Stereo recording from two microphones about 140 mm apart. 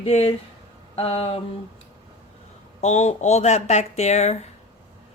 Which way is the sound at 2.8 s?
55° left (ahead or behind).